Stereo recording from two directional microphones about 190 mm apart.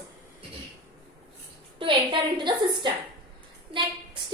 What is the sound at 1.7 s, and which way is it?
A woman's voice, 25° right (ahead or behind).